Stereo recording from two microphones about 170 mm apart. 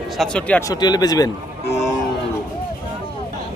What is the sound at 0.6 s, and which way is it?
Speech, 25° left (ahead or behind).